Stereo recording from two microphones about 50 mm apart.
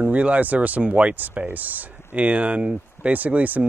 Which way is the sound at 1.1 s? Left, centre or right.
Right.